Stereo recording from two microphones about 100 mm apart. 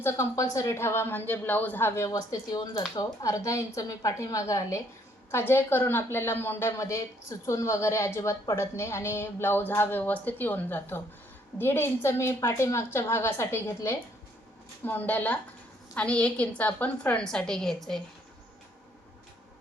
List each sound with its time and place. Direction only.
0.0 s a woman's voice: 30° left (ahead or behind); by 18.0 s 5° left (ahead or behind)